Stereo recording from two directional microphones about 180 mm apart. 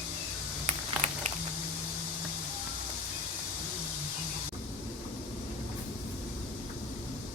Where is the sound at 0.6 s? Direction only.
40° right (ahead or behind).